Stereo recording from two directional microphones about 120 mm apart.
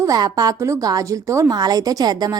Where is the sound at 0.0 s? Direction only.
30° right (ahead or behind).